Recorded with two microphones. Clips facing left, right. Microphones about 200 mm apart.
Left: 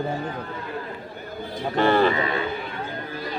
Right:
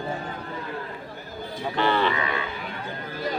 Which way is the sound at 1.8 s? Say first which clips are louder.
Left 5 dB; 45° left (ahead or behind).